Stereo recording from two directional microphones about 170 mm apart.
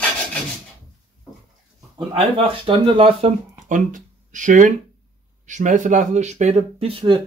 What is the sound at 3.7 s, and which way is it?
Speech, 50° right (ahead or behind).